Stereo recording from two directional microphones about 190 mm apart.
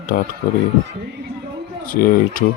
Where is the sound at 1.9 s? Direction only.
45° left (ahead or behind).